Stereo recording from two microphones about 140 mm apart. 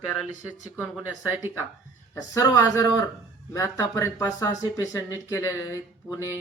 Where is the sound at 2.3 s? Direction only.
25° left (ahead or behind).